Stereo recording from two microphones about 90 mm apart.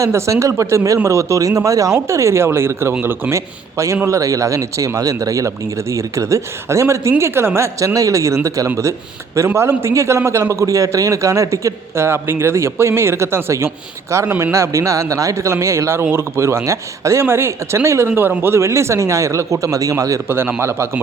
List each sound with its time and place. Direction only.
0.0 s a man's voice: 35° right (ahead or behind)
20.2 s a man's voice: 25° right (ahead or behind)